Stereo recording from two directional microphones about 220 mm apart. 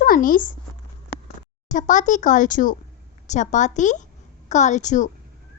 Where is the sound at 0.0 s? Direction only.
40° left (ahead or behind).